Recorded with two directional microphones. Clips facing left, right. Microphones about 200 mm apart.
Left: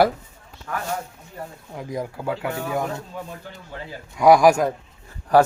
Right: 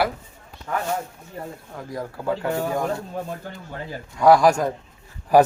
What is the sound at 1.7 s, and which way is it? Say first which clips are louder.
Speech: left 4 dB; 15° left (ahead or behind).